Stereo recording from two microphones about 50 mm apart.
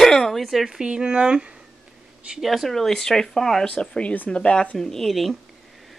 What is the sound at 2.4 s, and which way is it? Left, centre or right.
Speech, centre.